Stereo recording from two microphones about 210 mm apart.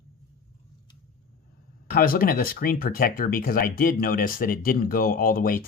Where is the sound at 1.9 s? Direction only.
45° left (ahead or behind).